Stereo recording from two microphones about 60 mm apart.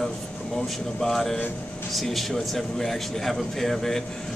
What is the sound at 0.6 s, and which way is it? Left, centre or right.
Speech, centre.